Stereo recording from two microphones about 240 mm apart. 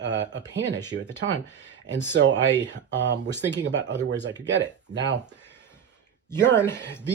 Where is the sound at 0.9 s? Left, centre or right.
Right.